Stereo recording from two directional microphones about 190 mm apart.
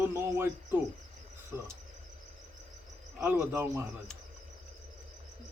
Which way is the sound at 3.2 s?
10° right (ahead or behind).